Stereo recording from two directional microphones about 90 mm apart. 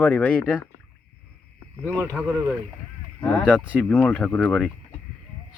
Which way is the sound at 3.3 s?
20° left (ahead or behind).